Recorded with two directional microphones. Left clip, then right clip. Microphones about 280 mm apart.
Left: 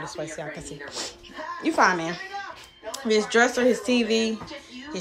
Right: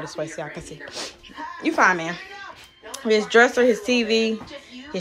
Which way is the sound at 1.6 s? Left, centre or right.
Centre.